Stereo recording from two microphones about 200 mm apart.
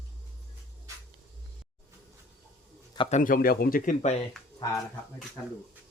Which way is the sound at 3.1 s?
40° left (ahead or behind).